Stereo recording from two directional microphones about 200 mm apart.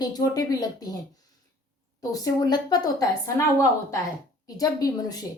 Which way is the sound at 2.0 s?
15° left (ahead or behind).